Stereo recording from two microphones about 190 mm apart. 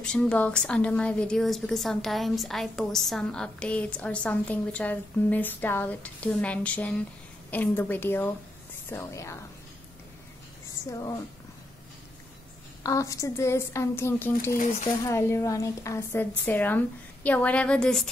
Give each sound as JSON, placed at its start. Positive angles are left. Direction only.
{"t": 0.0, "sound": "a woman's voice", "side_deg": 5}
{"t": 10.9, "sound": "a woman's voice", "side_deg": 20}
{"t": 12.8, "sound": "a woman's voice", "side_deg": 15}
{"t": 14.5, "sound": "speech", "side_deg": 45}
{"t": 15.0, "sound": "a woman's voice", "side_deg": 15}